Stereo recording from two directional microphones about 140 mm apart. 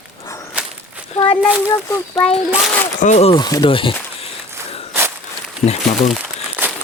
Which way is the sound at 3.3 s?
30° left (ahead or behind).